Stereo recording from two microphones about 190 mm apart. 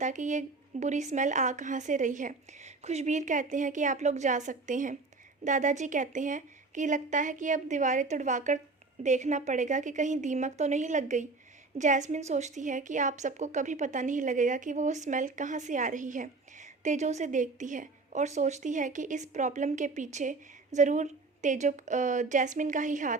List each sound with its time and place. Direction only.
0.0 s a woman's voice: 40° right (ahead or behind)